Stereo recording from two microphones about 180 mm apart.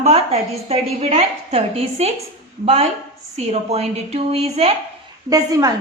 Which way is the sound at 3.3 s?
35° right (ahead or behind).